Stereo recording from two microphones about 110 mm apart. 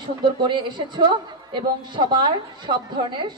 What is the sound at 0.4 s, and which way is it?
A woman's voice, 45° right (ahead or behind).